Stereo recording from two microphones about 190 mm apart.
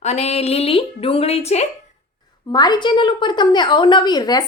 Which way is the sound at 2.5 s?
20° left (ahead or behind).